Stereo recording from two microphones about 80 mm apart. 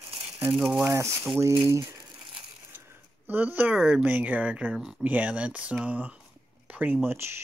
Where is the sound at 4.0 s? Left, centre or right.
Centre.